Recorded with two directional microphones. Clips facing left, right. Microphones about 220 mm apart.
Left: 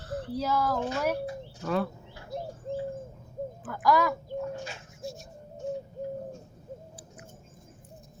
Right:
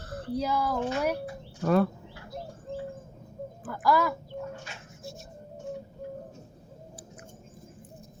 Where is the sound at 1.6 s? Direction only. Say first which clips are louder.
Right 5 dB; 50° right (ahead or behind).